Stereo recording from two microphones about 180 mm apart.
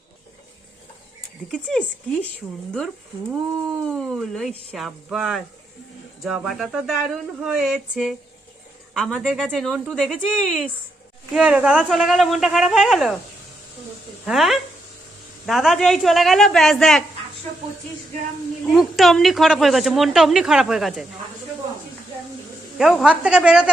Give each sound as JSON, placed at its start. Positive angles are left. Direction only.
{"t": 1.5, "sound": "speech", "side_deg": 5}
{"t": 3.8, "sound": "speech", "side_deg": 0}
{"t": 14.3, "sound": "speech", "side_deg": 0}
{"t": 18.7, "sound": "speech", "side_deg": 0}
{"t": 22.8, "sound": "speech", "side_deg": 0}